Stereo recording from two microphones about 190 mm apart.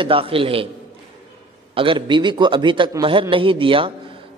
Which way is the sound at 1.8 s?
25° right (ahead or behind).